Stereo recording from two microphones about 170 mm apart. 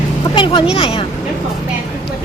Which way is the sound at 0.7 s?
35° left (ahead or behind).